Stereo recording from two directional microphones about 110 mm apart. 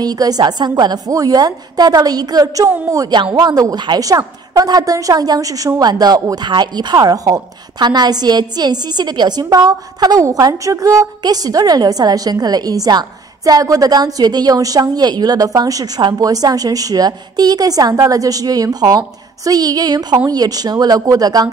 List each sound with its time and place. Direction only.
0.0 s a woman's voice: 35° right (ahead or behind)